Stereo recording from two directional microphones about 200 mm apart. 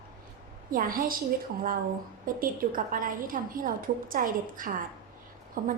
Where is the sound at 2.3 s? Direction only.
45° right (ahead or behind).